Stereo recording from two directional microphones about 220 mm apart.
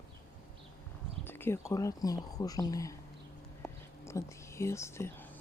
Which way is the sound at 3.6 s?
10° left (ahead or behind).